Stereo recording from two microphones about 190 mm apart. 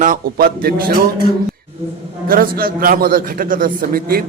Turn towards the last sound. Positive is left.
turn(degrees=-50)  # may be behind; listen again after turning